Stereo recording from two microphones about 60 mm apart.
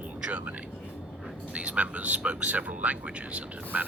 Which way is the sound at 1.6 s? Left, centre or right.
Right.